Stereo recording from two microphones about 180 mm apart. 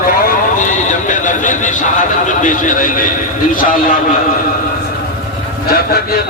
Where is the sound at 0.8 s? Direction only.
45° left (ahead or behind).